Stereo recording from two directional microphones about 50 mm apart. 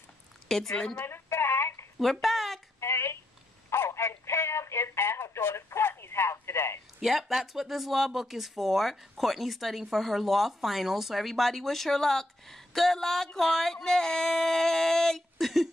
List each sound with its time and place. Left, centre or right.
0.5 s a woman's voice: centre
1.0 s telephone: left
2.2 s a sound: centre
2.8 s telephone: left
7.0 s speech: centre
15.3 s speech: centre